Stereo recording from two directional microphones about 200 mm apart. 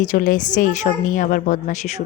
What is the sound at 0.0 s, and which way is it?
A woman's voice, 40° left (ahead or behind).